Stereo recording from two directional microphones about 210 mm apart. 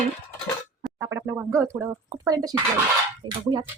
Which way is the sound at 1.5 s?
15° right (ahead or behind).